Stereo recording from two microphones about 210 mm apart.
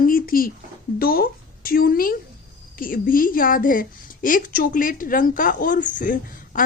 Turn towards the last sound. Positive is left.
turn(degrees=40)  # may be behind; listen again after turning